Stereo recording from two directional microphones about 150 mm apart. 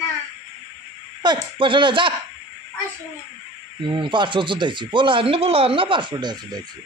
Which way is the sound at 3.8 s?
30° right (ahead or behind).